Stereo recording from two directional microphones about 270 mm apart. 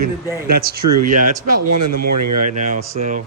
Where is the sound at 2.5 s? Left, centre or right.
Right.